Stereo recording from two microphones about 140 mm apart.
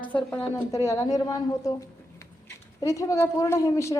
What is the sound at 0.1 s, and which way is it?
A woman's voice, 10° left (ahead or behind).